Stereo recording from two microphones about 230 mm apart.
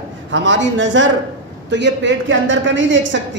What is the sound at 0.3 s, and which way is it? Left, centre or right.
A woman's voice, right.